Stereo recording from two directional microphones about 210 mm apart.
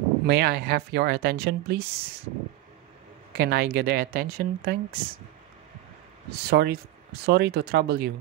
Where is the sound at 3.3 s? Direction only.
50° right (ahead or behind).